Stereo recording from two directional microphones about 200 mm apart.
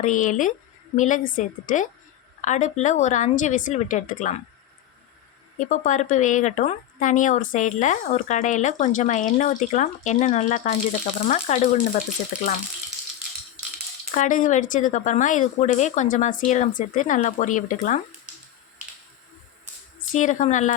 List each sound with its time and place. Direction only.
0.0 s a woman's voice: 40° left (ahead or behind)
5.5 s a woman's voice: 40° left (ahead or behind)
14.1 s a woman's voice: 40° left (ahead or behind)
20.0 s a woman's voice: 40° left (ahead or behind)